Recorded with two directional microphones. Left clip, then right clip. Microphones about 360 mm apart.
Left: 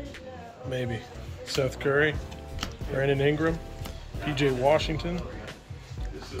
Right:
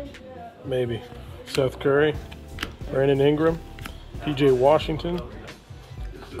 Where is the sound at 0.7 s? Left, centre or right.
Centre.